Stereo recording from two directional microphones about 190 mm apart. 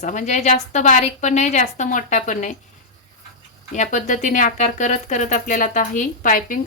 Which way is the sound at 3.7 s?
40° left (ahead or behind).